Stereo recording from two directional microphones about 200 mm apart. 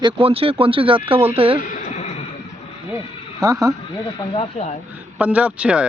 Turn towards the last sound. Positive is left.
turn(degrees=-5)  # may be behind; listen again after turning